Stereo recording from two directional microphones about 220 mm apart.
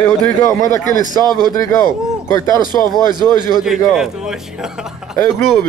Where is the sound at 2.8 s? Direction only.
20° right (ahead or behind).